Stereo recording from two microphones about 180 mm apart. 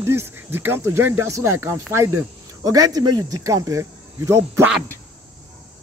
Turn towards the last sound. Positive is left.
turn(degrees=-15)  # may be behind; listen again after turning